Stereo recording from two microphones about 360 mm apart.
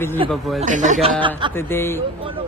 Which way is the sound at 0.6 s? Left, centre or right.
Right.